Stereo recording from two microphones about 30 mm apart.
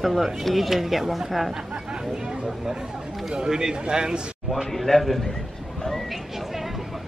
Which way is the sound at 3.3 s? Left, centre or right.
Right.